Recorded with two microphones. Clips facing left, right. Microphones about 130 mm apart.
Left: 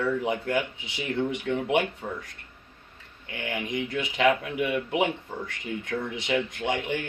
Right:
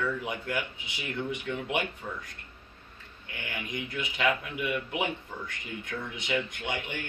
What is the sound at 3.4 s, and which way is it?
Speech, 25° left (ahead or behind).